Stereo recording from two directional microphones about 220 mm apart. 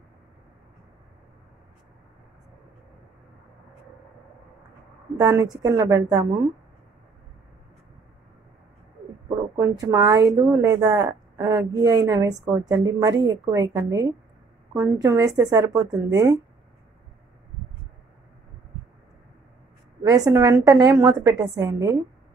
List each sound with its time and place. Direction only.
5.1 s a woman's voice: 15° right (ahead or behind)
9.6 s a woman's voice: 15° right (ahead or behind)
20.0 s a woman's voice: 15° right (ahead or behind)